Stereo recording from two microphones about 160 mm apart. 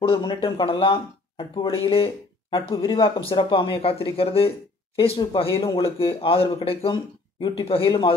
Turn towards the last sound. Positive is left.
turn(degrees=35)  # may be behind; listen again after turning